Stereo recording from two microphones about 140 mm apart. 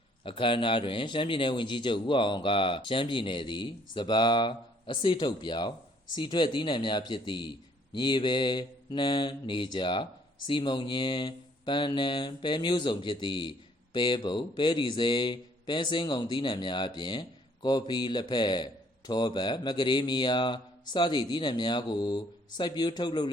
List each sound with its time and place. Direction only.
0.3 s mantra: 35° left (ahead or behind)